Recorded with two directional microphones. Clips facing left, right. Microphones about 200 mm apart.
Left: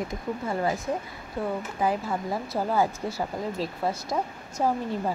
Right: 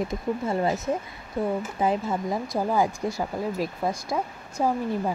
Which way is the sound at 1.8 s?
25° right (ahead or behind).